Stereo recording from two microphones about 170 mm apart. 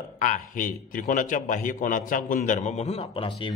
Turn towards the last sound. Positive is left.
turn(degrees=35)  # may be behind; listen again after turning